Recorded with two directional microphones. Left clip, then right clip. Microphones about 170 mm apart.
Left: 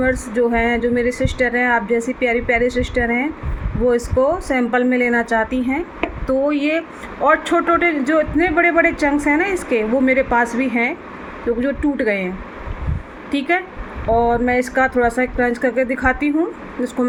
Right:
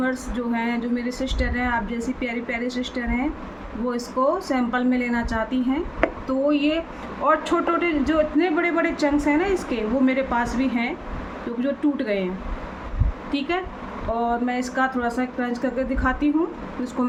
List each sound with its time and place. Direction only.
0.0 s a man's voice: 25° left (ahead or behind)
14.3 s a man's voice: 30° left (ahead or behind)